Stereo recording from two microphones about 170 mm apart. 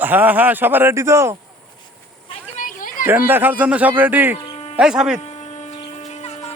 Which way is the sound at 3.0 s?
10° right (ahead or behind).